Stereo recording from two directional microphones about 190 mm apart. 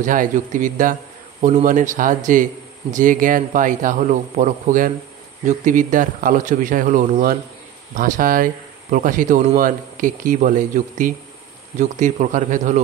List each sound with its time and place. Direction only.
0.0 s speech: 45° right (ahead or behind)